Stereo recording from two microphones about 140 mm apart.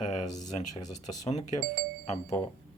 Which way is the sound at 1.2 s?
55° left (ahead or behind).